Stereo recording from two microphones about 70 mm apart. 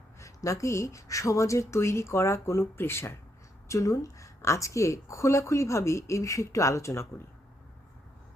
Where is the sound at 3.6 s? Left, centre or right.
Left.